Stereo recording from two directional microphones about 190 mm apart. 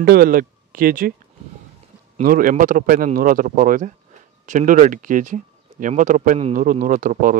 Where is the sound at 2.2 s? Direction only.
45° right (ahead or behind).